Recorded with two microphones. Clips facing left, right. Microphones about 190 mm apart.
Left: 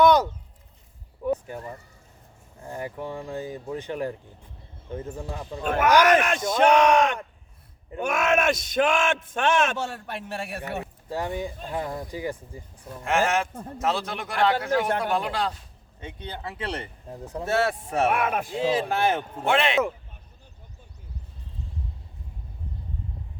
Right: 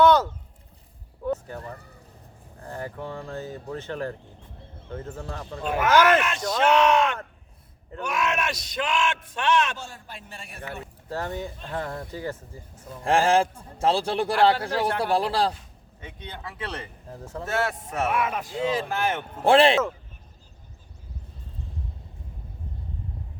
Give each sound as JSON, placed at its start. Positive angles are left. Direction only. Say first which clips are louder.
{"t": 0.0, "sound": "a sound", "louder": "even", "side_deg": 15}
{"t": 1.2, "sound": "speech", "louder": "left 2 dB", "side_deg": 15}
{"t": 6.1, "sound": "speech", "louder": "left 3 dB", "side_deg": 50}
{"t": 6.4, "sound": "speech", "louder": "left 1 dB", "side_deg": 20}
{"t": 8.0, "sound": "speech", "louder": "left 5 dB", "side_deg": 50}
{"t": 9.7, "sound": "a man's voice", "louder": "left 9 dB", "side_deg": 70}
{"t": 11.1, "sound": "speech", "louder": "left 2 dB", "side_deg": 15}
{"t": 13.1, "sound": "a man's voice", "louder": "right 3 dB", "side_deg": -30}
{"t": 16.0, "sound": "speech", "louder": "left 3 dB", "side_deg": 30}
{"t": 17.1, "sound": "speech", "louder": "left 2 dB", "side_deg": 15}
{"t": 17.4, "sound": "speech", "louder": "left 3 dB", "side_deg": 30}
{"t": 18.1, "sound": "speech", "louder": "left 1 dB", "side_deg": 55}
{"t": 18.5, "sound": "speech", "louder": "left 2 dB", "side_deg": 30}
{"t": 19.5, "sound": "a man's voice", "louder": "right 5 dB", "side_deg": -35}